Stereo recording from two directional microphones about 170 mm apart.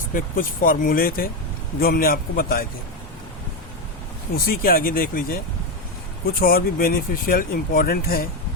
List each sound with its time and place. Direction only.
0.1 s speech: 55° left (ahead or behind)
4.4 s speech: 60° left (ahead or behind)